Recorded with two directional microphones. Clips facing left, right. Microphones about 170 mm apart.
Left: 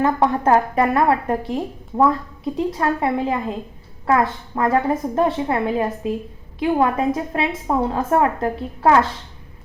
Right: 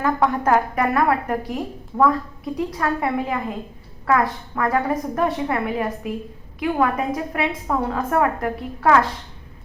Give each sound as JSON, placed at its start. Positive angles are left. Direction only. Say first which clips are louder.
{"t": 0.0, "sound": "a woman's voice", "louder": "left 2 dB", "side_deg": 30}